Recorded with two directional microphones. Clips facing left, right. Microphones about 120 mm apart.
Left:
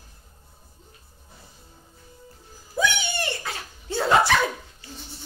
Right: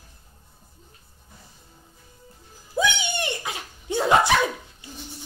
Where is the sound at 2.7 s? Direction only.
20° right (ahead or behind).